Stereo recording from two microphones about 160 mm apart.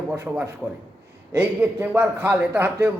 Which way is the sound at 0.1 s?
10° right (ahead or behind).